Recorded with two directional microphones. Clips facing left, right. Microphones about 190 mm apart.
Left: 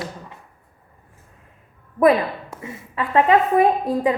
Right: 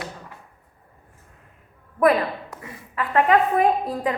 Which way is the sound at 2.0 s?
25° left (ahead or behind).